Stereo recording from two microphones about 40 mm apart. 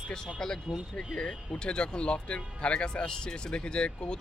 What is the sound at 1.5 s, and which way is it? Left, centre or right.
Speech, left.